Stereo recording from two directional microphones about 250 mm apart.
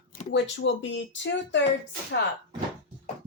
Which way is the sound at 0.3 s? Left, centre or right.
Left.